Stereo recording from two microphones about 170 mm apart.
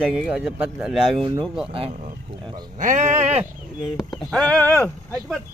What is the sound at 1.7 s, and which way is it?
Speech, 35° right (ahead or behind).